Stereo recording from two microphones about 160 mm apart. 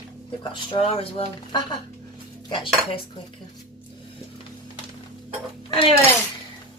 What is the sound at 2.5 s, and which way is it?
Speech, 30° left (ahead or behind).